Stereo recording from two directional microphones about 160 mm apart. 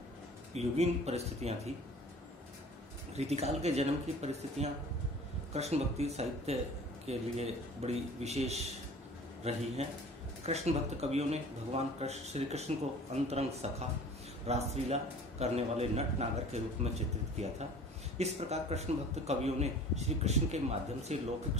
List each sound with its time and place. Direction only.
0.6 s a man's voice: 40° right (ahead or behind)
3.2 s a man's voice: 40° right (ahead or behind)
18.1 s speech: 40° right (ahead or behind)